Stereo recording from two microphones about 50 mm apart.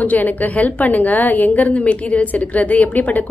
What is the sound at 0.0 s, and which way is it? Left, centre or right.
A woman's voice, left.